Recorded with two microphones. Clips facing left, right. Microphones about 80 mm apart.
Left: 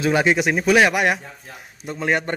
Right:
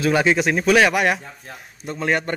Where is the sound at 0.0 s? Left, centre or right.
Centre.